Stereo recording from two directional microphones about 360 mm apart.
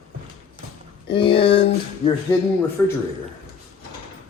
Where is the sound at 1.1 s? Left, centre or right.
Centre.